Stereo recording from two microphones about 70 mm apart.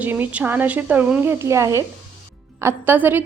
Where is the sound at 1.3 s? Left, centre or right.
Right.